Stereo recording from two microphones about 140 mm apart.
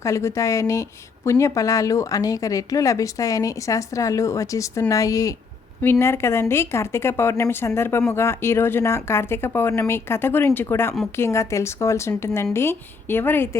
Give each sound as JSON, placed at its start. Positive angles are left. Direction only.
{"t": 0.0, "sound": "a woman's voice", "side_deg": 20}